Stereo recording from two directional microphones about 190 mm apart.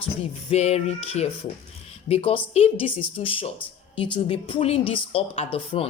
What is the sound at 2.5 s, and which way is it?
A woman's voice, 30° left (ahead or behind).